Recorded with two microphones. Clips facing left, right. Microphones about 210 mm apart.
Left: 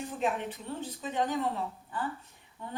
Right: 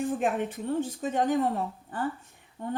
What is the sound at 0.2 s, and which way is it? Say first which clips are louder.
Speech: right 4 dB; 50° right (ahead or behind).